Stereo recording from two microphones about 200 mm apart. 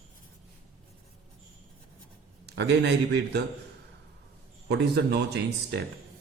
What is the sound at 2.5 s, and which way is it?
Speech, 60° right (ahead or behind).